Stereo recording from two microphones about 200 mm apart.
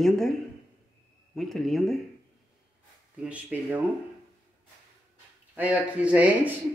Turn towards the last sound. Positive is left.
turn(degrees=-5)  # may be behind; listen again after turning